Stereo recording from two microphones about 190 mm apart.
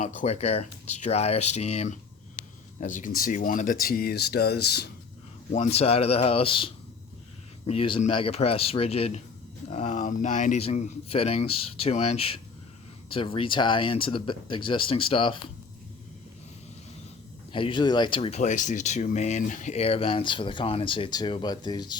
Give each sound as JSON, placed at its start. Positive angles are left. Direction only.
{"t": 0.0, "sound": "speech", "side_deg": 35}
{"t": 5.5, "sound": "speech", "side_deg": 35}
{"t": 7.7, "sound": "speech", "side_deg": 30}
{"t": 17.5, "sound": "speech", "side_deg": 25}